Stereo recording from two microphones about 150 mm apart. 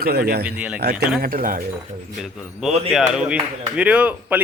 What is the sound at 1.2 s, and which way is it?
Speech, 70° right (ahead or behind).